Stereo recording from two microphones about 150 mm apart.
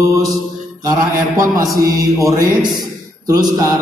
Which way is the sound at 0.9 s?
20° right (ahead or behind).